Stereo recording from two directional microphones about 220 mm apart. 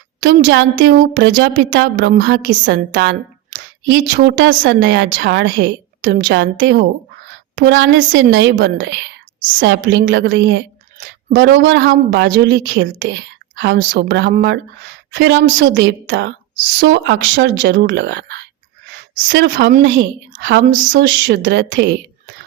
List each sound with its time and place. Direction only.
0.3 s a woman's voice: 55° right (ahead or behind)
2.0 s a woman's voice: 40° right (ahead or behind)
2.6 s a woman's voice: 55° right (ahead or behind)